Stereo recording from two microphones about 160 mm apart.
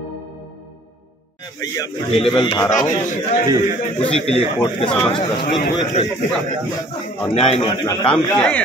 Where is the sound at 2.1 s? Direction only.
30° left (ahead or behind).